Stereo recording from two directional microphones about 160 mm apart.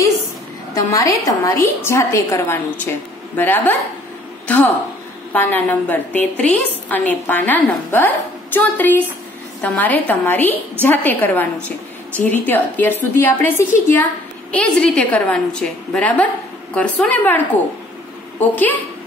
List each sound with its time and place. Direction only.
0.7 s a woman's voice: 20° left (ahead or behind)
5.3 s a woman's voice: 10° left (ahead or behind)